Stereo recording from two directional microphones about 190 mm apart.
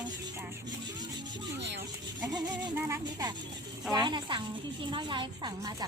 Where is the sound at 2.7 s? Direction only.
15° right (ahead or behind).